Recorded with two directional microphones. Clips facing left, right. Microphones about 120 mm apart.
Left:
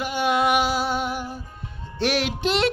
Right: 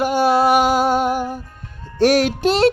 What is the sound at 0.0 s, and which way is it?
Music, 40° right (ahead or behind).